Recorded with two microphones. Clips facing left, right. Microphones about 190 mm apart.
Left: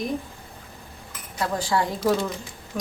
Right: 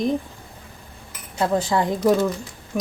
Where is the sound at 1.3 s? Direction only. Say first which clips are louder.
Right 4 dB; 25° right (ahead or behind).